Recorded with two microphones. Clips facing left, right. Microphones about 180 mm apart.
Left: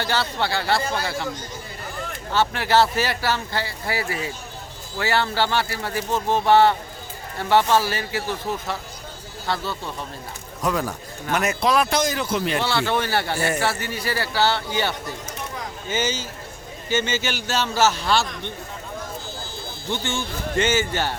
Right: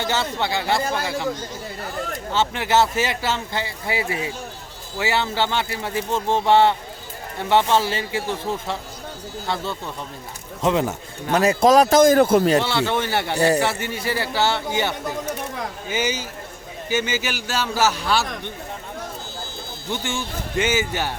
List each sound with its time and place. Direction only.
0.0 s speech: 20° right (ahead or behind)
2.3 s speech: 20° right (ahead or behind)
6.1 s speech: 10° left (ahead or behind)
6.3 s a man's voice: 25° right (ahead or behind); by 12.5 s 50° right (ahead or behind)
12.5 s a man's voice: 20° right (ahead or behind)
19.9 s a man's voice: 10° right (ahead or behind)